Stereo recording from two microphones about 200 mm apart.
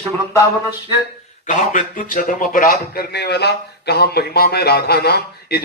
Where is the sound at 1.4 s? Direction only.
40° left (ahead or behind).